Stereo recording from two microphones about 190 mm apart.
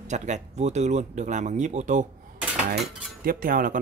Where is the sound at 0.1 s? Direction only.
40° right (ahead or behind).